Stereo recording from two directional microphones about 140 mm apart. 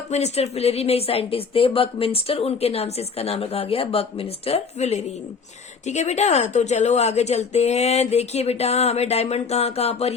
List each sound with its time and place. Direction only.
0.1 s speech: 50° left (ahead or behind)